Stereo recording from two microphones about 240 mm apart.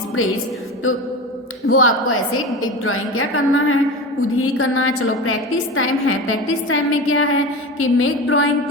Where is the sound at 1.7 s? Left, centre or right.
Left.